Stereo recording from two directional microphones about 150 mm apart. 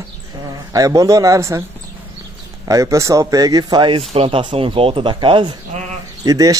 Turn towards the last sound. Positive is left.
turn(degrees=-25)  # may be behind; listen again after turning